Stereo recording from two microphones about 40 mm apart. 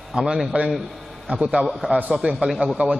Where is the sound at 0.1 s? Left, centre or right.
Centre.